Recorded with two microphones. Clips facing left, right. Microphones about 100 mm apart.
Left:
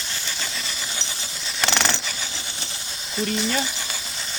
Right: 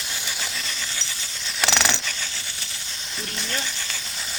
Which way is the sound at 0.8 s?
20° left (ahead or behind).